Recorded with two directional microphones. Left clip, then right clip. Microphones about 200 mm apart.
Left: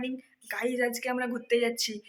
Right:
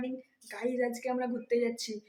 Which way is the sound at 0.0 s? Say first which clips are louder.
Left 2 dB; centre (ahead or behind).